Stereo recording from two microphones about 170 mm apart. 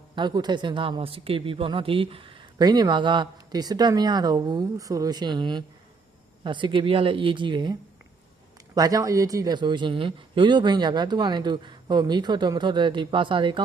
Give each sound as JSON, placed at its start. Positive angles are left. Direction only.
{"t": 0.2, "sound": "speech", "side_deg": -25}